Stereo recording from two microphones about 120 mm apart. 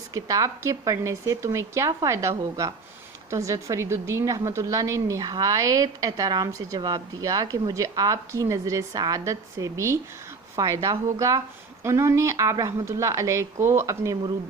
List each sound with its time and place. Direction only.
0.1 s a woman's voice: 30° right (ahead or behind)